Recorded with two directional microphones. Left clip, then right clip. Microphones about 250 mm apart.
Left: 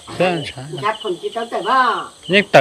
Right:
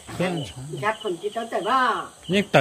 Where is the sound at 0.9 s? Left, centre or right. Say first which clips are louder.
Left 4 dB; centre.